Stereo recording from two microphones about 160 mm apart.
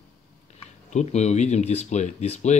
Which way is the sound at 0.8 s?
45° left (ahead or behind).